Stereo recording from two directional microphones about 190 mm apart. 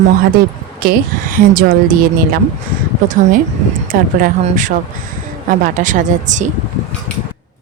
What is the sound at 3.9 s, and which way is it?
A woman's voice, 45° right (ahead or behind).